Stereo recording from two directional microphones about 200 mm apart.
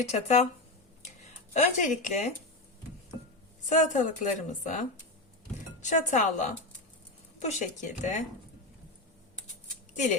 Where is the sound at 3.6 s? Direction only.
40° left (ahead or behind).